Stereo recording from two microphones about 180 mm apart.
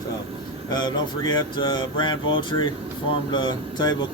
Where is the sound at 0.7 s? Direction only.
25° left (ahead or behind).